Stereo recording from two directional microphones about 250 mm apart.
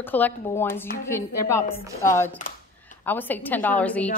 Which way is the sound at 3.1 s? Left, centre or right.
Centre.